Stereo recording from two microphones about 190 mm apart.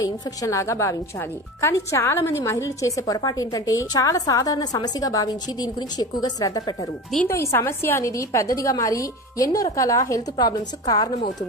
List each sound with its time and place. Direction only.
0.0 s a woman's voice: 15° left (ahead or behind)